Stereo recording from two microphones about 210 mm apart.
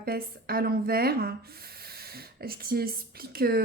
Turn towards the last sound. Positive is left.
turn(degrees=-45)  # may be behind; listen again after turning